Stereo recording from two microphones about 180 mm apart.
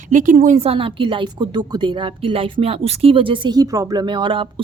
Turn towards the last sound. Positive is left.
turn(degrees=-30)  # may be behind; listen again after turning